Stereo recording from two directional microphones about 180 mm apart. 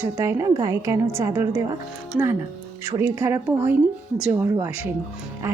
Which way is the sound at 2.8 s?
15° right (ahead or behind).